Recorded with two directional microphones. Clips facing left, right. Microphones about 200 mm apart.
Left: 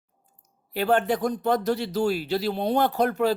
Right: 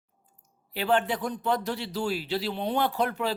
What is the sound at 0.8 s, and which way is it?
Speech, 45° left (ahead or behind).